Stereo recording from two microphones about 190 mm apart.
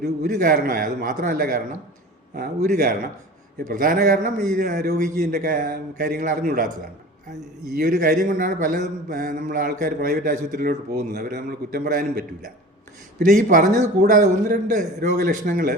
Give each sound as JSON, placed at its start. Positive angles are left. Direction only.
{"t": 0.0, "sound": "a man's voice", "side_deg": -50}
{"t": 7.8, "sound": "a man's voice", "side_deg": -45}